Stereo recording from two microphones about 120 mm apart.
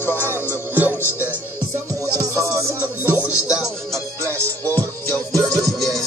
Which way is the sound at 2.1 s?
30° right (ahead or behind).